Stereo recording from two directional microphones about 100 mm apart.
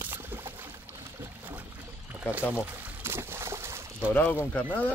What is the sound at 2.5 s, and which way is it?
Pour, 20° right (ahead or behind).